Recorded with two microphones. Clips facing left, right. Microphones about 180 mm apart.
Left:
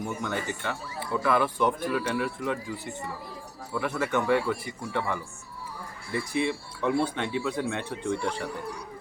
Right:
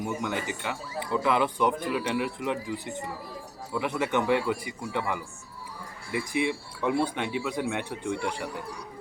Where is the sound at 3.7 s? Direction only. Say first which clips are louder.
Even; 20° right (ahead or behind).